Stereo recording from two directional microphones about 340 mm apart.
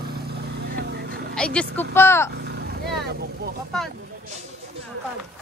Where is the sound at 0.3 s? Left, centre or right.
Right.